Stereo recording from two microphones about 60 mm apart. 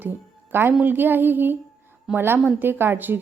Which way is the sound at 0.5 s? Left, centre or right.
Right.